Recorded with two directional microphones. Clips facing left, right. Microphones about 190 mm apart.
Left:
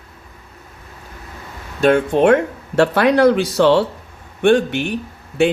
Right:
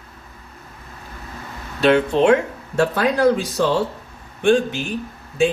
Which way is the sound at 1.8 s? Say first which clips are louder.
Left 2 dB; 50° left (ahead or behind).